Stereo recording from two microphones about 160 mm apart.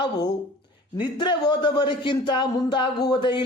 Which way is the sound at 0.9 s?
30° left (ahead or behind).